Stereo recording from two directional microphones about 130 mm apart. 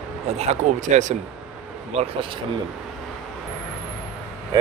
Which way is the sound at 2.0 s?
40° right (ahead or behind).